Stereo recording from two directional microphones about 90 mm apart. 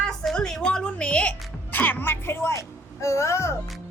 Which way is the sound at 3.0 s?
35° left (ahead or behind).